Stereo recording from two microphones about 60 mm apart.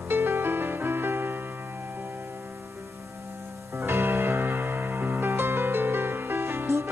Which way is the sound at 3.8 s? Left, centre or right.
Right.